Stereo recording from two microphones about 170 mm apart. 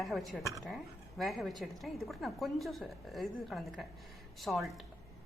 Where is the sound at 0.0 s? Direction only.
Centre (ahead or behind).